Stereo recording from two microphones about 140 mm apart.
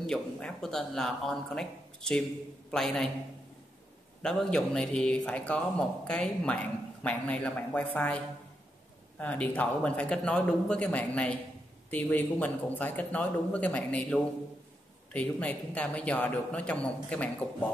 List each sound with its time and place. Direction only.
0.0 s speech: 5° left (ahead or behind)
4.2 s speech: 5° left (ahead or behind)
9.2 s speech: 10° left (ahead or behind)